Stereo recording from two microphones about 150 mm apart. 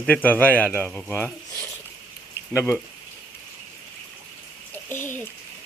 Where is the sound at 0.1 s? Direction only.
10° left (ahead or behind).